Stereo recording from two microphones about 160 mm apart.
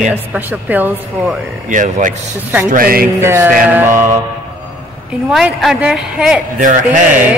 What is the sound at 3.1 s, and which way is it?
Speech, 15° right (ahead or behind).